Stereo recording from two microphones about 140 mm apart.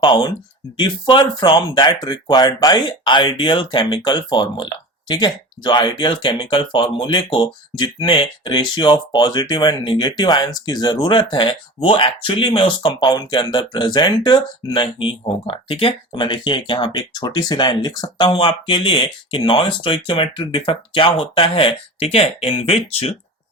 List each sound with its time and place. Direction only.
0.0 s speech: 35° left (ahead or behind)